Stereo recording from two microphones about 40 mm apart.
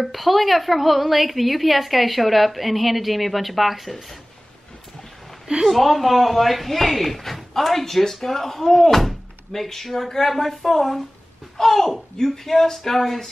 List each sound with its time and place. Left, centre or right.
0.0 s speech: centre
5.7 s speech: centre